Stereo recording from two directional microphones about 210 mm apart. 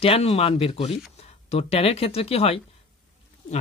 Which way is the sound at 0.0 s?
25° left (ahead or behind).